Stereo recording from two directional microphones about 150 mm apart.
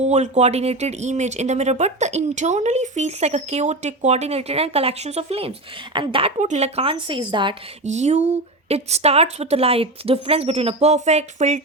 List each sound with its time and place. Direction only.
0.0 s speech: 50° right (ahead or behind)
6.4 s a woman's voice: 50° right (ahead or behind); by 7.5 s 30° right (ahead or behind)
7.9 s speech: 50° right (ahead or behind)